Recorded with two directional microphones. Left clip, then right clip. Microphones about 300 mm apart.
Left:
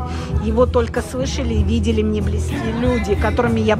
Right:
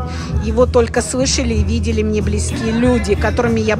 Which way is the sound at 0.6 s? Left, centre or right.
Centre.